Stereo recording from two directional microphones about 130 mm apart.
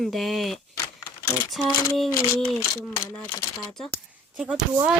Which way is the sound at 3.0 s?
15° left (ahead or behind).